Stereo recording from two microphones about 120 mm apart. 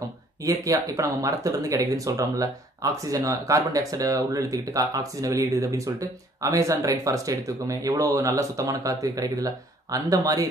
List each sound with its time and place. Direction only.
0.4 s speech: 30° right (ahead or behind)